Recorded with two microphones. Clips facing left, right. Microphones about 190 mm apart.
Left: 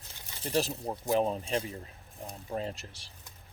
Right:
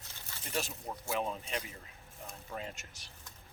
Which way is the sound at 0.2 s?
15° left (ahead or behind).